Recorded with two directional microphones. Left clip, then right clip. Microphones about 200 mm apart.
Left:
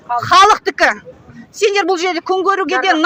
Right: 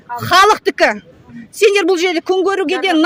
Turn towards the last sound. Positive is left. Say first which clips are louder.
# left 1 dB
turn(degrees=-55)  # may be behind; listen again after turning